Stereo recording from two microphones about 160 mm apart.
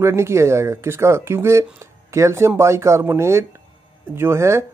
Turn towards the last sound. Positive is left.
turn(degrees=-15)  # may be behind; listen again after turning